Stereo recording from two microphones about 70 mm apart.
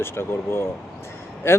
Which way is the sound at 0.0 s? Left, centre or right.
Left.